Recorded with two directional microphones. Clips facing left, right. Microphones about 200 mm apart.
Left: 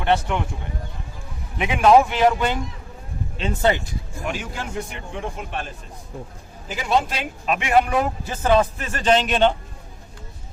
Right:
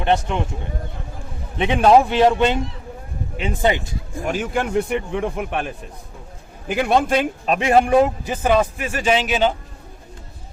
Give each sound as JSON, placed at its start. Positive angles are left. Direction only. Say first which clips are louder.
{"t": 0.0, "sound": "a man's voice", "louder": "right 1 dB", "side_deg": -20}
{"t": 1.5, "sound": "a man's voice", "louder": "right 1 dB", "side_deg": -30}
{"t": 3.3, "sound": "a man's voice", "louder": "right 1 dB", "side_deg": -15}
{"t": 4.3, "sound": "a man's voice", "louder": "right 8 dB", "side_deg": -55}
{"t": 7.4, "sound": "a man's voice", "louder": "even", "side_deg": -35}